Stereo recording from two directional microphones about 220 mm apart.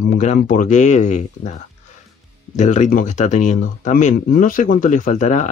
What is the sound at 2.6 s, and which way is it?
Speech, 35° left (ahead or behind).